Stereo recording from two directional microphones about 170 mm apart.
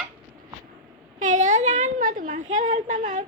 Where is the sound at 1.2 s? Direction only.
45° right (ahead or behind).